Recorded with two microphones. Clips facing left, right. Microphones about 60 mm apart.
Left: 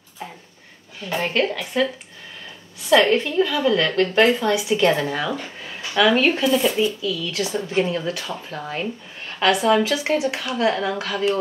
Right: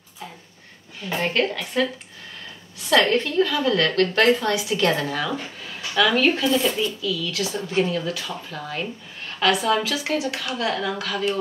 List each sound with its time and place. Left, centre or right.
1.0 s a woman's voice: centre
2.9 s a woman's voice: centre
6.4 s speech: centre